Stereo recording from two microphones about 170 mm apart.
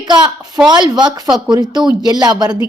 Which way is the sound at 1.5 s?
25° right (ahead or behind).